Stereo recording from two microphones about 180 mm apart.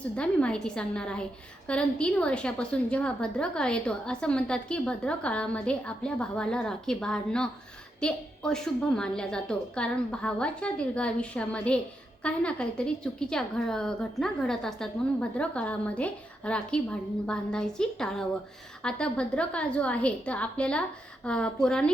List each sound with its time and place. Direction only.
0.2 s a woman's voice: 5° left (ahead or behind)